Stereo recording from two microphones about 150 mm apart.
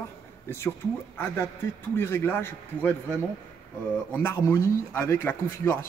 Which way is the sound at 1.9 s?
15° left (ahead or behind).